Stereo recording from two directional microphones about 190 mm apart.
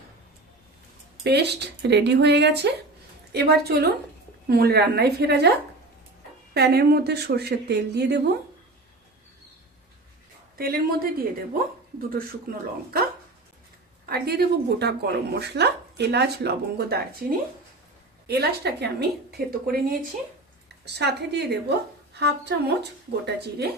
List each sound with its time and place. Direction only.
1.2 s speech: 60° right (ahead or behind)
10.6 s speech: 50° right (ahead or behind)
14.1 s speech: 55° right (ahead or behind)
20.8 s speech: 60° right (ahead or behind)